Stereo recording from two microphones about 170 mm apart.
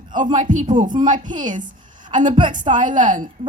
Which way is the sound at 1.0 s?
50° right (ahead or behind).